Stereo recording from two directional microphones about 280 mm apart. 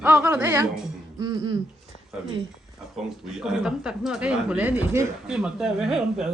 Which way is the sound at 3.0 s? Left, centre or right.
Centre.